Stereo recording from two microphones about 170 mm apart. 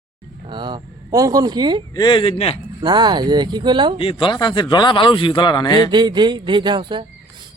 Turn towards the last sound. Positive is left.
turn(degrees=-30)  # may be behind; listen again after turning